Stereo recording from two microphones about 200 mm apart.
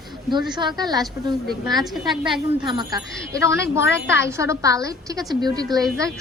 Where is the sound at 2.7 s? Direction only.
25° right (ahead or behind).